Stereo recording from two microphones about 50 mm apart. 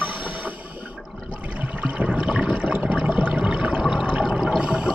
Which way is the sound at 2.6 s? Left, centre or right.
Right.